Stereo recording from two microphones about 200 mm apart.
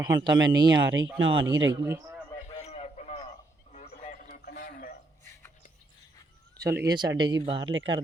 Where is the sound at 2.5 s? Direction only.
30° left (ahead or behind).